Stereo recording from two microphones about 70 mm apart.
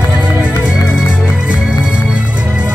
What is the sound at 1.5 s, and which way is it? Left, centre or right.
Music, centre.